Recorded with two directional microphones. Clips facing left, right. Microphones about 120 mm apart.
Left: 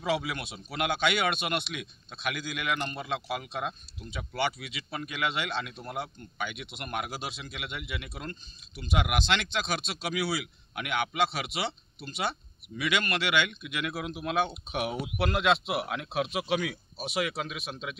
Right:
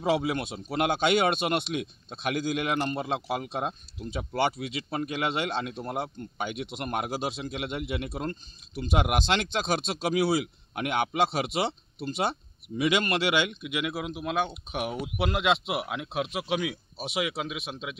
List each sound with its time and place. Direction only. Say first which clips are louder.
0.0 s speech: right 4 dB; 30° right (ahead or behind)
13.6 s speech: right 3 dB; 15° right (ahead or behind)
13.9 s speech: left 3 dB; centre (ahead or behind)
17.6 s speech: right 2 dB; 20° right (ahead or behind)